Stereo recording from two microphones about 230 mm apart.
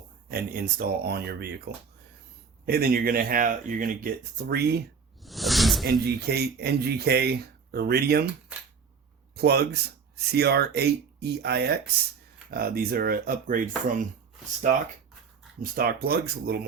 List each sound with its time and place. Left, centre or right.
0.3 s speech: right
5.2 s snake: centre
5.8 s speech: right
9.3 s speech: right
15.6 s speech: right